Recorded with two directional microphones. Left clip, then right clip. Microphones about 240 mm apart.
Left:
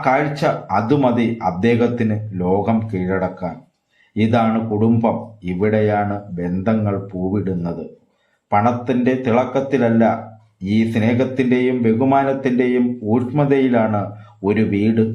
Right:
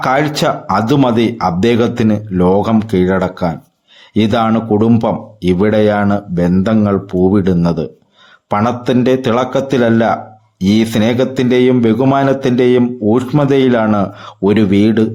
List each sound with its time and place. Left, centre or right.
0.0 s a man's voice: right